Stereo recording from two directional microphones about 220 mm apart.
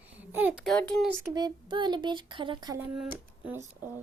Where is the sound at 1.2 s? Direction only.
20° right (ahead or behind).